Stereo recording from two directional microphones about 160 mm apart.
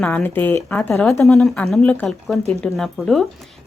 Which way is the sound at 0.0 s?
10° left (ahead or behind).